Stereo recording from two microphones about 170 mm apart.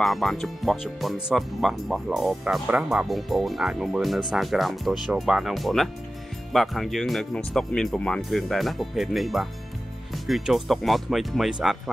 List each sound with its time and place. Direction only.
0.0 s speech: centre (ahead or behind)